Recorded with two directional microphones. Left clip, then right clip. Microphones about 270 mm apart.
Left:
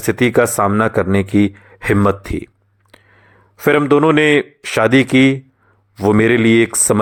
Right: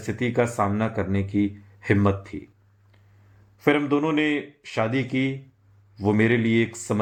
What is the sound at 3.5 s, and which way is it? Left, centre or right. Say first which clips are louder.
Speech: left 9 dB; left.